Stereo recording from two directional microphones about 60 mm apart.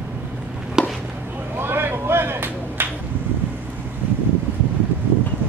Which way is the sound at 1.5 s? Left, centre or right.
Right.